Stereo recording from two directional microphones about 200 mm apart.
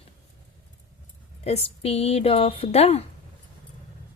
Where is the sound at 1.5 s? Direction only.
30° left (ahead or behind).